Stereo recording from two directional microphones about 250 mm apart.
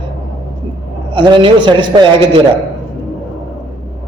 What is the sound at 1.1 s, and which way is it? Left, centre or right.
A man's voice, centre.